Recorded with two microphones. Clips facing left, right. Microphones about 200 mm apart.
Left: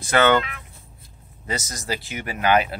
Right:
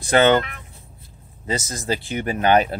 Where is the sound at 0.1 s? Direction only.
25° right (ahead or behind).